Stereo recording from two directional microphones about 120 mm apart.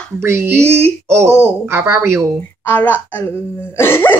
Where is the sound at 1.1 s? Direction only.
20° right (ahead or behind).